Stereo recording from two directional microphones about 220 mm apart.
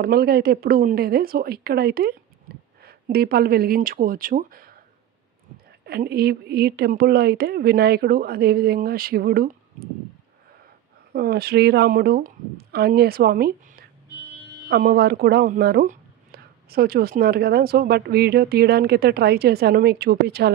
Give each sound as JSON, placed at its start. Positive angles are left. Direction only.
{"t": 0.0, "sound": "a woman's voice", "side_deg": -45}
{"t": 5.9, "sound": "speech", "side_deg": -45}
{"t": 11.1, "sound": "speech", "side_deg": -45}